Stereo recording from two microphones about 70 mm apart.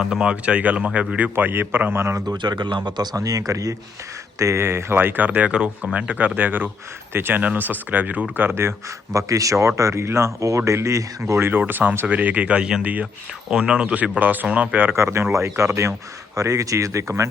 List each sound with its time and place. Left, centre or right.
0.0 s speech: centre
1.5 s a man's voice: right
2.3 s speech: right
3.2 s speech: right
9.1 s speech: right; by 14.9 s centre
14.9 s a man's voice: right